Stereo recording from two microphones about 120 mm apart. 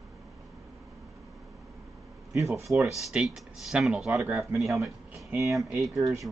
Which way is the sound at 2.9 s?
5° right (ahead or behind).